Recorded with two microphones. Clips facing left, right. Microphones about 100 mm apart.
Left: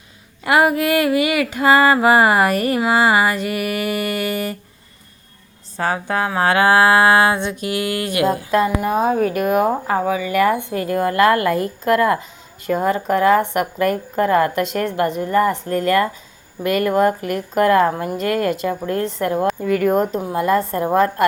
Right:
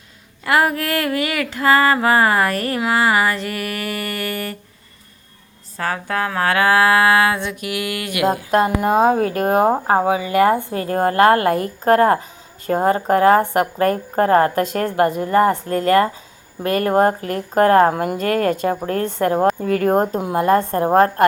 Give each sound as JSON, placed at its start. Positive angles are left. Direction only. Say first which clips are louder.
{"t": 0.4, "sound": "a sound", "louder": "left 2 dB", "side_deg": 15}
{"t": 5.7, "sound": "music", "louder": "left 2 dB", "side_deg": 25}
{"t": 8.3, "sound": "a woman's voice", "louder": "right 3 dB", "side_deg": -40}
{"t": 8.8, "sound": "a woman's voice", "louder": "right 2 dB", "side_deg": -55}
{"t": 17.9, "sound": "a woman's voice", "louder": "right 2 dB", "side_deg": -65}
{"t": 18.2, "sound": "a woman's voice", "louder": "even", "side_deg": -50}